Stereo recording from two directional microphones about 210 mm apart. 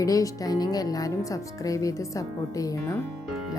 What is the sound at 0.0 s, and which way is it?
Speech, 15° left (ahead or behind).